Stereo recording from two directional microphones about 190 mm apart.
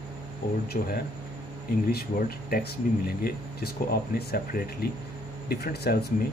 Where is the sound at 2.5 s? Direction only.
50° left (ahead or behind).